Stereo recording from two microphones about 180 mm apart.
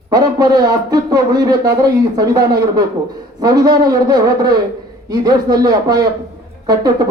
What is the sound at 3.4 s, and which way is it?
A man's voice, 20° right (ahead or behind).